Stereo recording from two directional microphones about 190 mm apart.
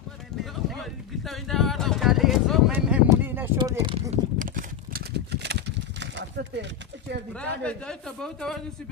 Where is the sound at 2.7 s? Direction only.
10° right (ahead or behind).